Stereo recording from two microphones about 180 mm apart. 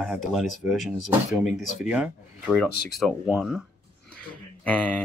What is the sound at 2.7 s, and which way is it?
Speech, 60° left (ahead or behind).